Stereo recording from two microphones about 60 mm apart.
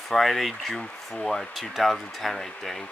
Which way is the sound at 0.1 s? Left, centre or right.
Centre.